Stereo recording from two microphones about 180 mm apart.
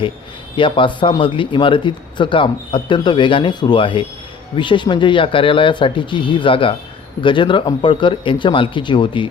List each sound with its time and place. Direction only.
0.5 s speech: 25° left (ahead or behind)